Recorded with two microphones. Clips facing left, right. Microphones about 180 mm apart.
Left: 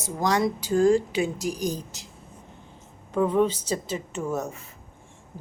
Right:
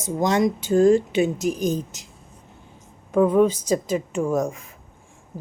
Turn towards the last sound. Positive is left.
turn(degrees=-10)  # may be behind; listen again after turning